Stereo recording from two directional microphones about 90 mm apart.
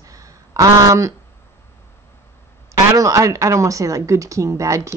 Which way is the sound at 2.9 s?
35° right (ahead or behind).